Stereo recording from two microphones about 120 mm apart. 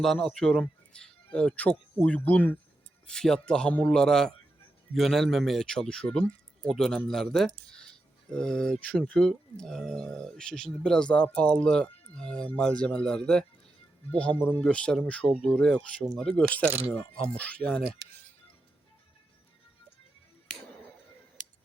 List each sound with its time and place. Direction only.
0.0 s speech: 5° left (ahead or behind)
16.6 s speech: 15° right (ahead or behind)
17.3 s speech: 10° left (ahead or behind)